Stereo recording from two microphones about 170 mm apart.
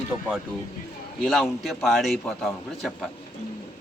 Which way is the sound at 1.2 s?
Centre (ahead or behind).